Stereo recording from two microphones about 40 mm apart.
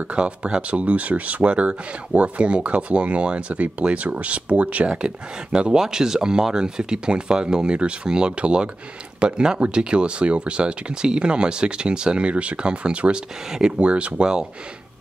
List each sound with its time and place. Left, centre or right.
0.1 s speech: right
4.8 s speech: right
13.7 s speech: right